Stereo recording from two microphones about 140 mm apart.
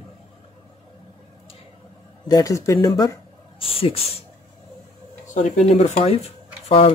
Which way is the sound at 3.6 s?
45° left (ahead or behind).